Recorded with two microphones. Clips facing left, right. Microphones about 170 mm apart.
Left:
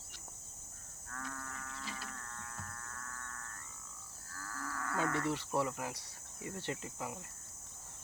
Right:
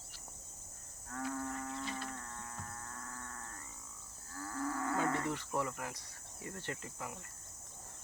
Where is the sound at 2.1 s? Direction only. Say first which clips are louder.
Right 3 dB; 25° right (ahead or behind).